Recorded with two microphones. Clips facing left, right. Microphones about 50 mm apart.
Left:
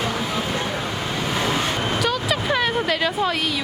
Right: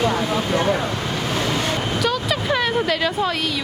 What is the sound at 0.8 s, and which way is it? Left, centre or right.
Vehicle, centre.